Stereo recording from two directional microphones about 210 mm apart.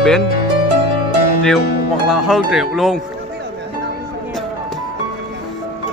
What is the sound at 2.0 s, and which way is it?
Speech, centre (ahead or behind).